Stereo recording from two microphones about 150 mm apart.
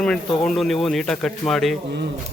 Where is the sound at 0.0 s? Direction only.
5° left (ahead or behind).